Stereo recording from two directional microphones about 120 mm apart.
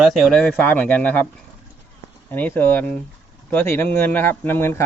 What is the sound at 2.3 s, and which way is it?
Speech, 15° left (ahead or behind).